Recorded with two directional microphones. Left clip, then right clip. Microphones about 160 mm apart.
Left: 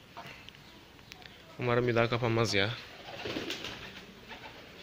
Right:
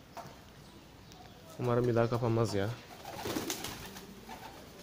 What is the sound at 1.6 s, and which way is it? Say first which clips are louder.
Speech: left 2 dB; centre (ahead or behind).